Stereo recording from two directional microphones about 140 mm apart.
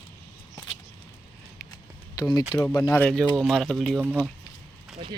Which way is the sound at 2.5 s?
15° left (ahead or behind).